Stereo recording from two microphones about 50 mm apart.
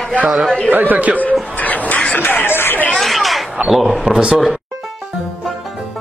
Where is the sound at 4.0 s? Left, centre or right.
Centre.